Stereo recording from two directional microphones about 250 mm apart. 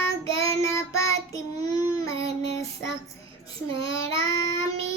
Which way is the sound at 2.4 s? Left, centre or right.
Left.